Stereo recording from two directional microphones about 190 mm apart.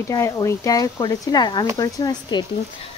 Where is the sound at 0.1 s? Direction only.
15° left (ahead or behind).